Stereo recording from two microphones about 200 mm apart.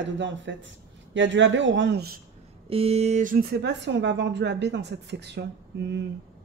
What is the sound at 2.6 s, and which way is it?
Speech, 30° right (ahead or behind).